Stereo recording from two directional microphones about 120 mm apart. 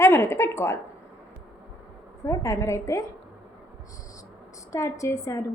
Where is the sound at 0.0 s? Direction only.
20° left (ahead or behind).